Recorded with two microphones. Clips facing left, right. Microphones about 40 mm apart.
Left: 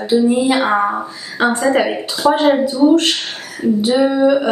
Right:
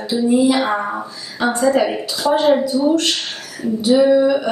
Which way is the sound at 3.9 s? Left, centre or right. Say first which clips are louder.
Right 2 dB; centre.